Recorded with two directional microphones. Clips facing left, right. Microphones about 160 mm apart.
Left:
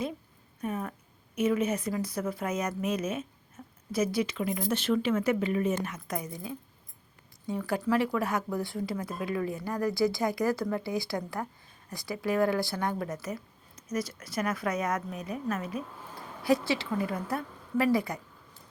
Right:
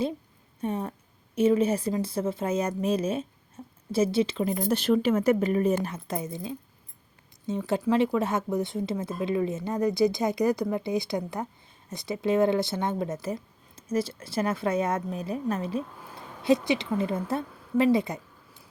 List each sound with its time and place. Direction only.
0.6 s speech: 30° right (ahead or behind)
3.6 s a sound: 30° right (ahead or behind)
3.9 s a woman's voice: 30° right (ahead or behind)